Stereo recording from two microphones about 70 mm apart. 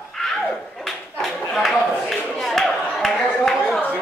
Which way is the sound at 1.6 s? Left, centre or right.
Centre.